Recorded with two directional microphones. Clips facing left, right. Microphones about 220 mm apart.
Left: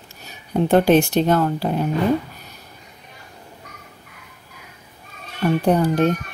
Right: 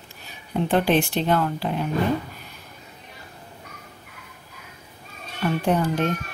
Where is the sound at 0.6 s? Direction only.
45° left (ahead or behind).